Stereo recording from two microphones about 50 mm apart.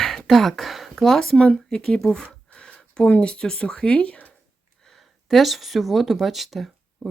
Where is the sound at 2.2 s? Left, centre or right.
Left.